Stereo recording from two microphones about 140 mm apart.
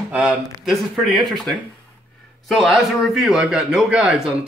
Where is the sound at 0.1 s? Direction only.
5° right (ahead or behind).